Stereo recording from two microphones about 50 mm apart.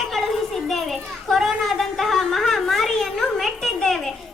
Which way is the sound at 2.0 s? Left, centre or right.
Centre.